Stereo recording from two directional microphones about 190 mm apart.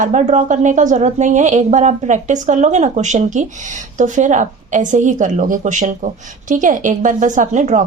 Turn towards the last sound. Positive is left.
turn(degrees=-40)  # may be behind; listen again after turning